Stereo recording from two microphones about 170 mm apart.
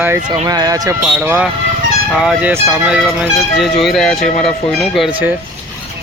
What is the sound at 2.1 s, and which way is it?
Music, 5° right (ahead or behind).